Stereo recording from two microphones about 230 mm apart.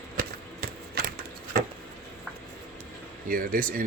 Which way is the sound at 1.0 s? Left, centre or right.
Right.